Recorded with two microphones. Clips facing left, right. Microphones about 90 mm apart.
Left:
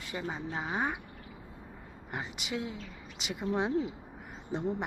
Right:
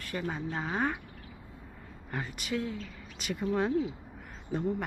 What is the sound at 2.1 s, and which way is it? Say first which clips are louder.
Speech: right 2 dB; 20° left (ahead or behind).